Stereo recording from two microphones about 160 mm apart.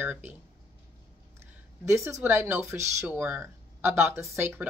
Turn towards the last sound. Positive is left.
turn(degrees=-15)  # may be behind; listen again after turning